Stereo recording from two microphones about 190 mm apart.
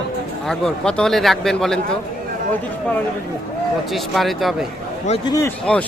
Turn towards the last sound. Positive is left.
turn(degrees=15)  # may be behind; listen again after turning